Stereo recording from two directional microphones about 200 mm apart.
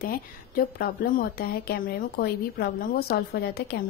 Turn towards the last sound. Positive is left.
turn(degrees=50)  # may be behind; listen again after turning